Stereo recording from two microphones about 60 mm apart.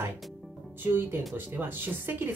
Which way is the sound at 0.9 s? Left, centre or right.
Right.